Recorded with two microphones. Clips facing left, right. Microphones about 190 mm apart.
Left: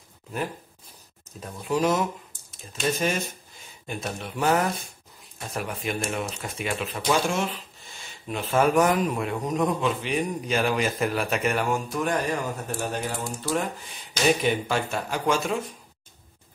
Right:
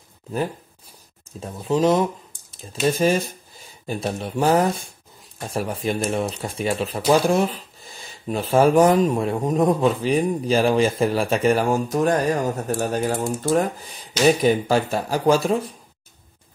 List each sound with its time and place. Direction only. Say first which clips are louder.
1.4 s speech: right 5 dB; 25° right (ahead or behind)